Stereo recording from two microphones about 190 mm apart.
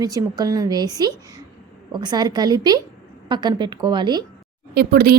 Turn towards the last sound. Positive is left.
turn(degrees=-55)  # may be behind; listen again after turning